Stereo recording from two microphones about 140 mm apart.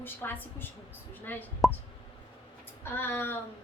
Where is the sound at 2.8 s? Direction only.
15° left (ahead or behind).